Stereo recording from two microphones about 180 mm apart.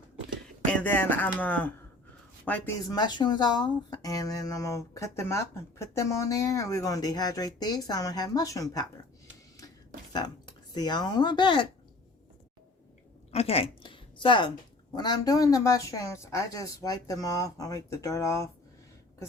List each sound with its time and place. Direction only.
0.6 s speech: 5° left (ahead or behind)
2.9 s speech: 25° left (ahead or behind)
10.1 s speech: 20° left (ahead or behind)
13.3 s a woman's voice: 35° left (ahead or behind); by 18.4 s 15° left (ahead or behind)